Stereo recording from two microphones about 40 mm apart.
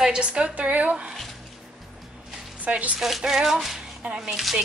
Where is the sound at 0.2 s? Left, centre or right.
Right.